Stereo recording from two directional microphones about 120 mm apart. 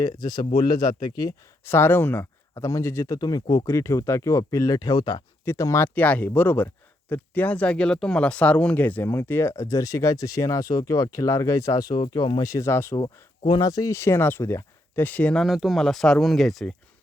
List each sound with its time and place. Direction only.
0.0 s speech: 35° left (ahead or behind)
1.6 s speech: 20° left (ahead or behind); by 5.2 s 40° left (ahead or behind)
5.5 s speech: 25° left (ahead or behind)
13.0 s speech: 35° left (ahead or behind); by 16.7 s centre (ahead or behind)